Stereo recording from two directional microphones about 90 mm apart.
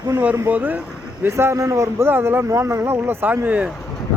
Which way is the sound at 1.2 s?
30° right (ahead or behind).